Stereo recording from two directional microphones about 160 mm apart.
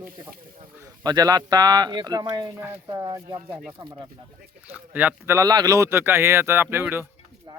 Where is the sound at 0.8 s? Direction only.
25° right (ahead or behind).